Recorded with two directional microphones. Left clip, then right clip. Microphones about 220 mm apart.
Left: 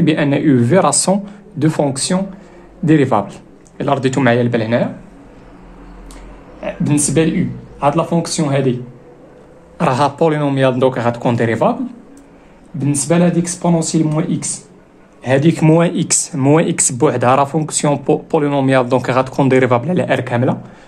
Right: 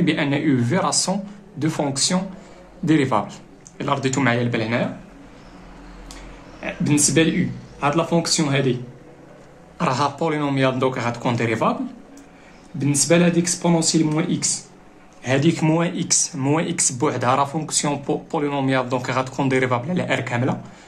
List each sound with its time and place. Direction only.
0.0 s speech: 30° left (ahead or behind)
6.6 s a man's voice: 20° left (ahead or behind)
9.8 s a man's voice: 35° left (ahead or behind)
12.7 s a man's voice: 20° left (ahead or behind)